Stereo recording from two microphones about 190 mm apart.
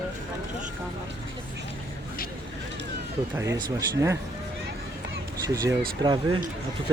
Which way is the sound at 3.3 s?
15° right (ahead or behind).